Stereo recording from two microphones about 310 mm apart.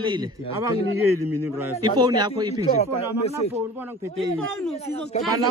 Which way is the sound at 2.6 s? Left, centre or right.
Centre.